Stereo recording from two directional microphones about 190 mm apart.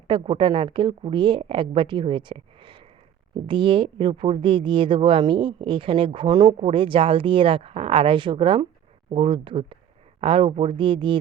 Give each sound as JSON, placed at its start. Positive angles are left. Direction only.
{"t": 0.1, "sound": "speech", "side_deg": -25}